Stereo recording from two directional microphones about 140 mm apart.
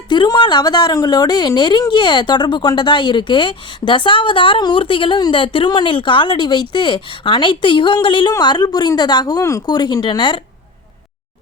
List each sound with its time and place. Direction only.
0.1 s a woman's voice: 30° left (ahead or behind)